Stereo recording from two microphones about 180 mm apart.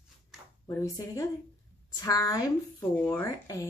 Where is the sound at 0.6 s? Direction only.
15° left (ahead or behind).